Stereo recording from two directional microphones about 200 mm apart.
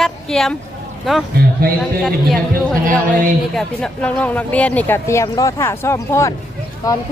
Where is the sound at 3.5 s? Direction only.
5° left (ahead or behind).